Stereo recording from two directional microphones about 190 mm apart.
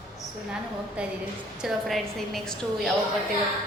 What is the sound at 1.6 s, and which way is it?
A woman's voice, centre (ahead or behind).